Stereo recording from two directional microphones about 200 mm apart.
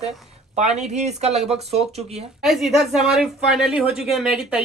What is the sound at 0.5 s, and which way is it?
Speech, 35° right (ahead or behind).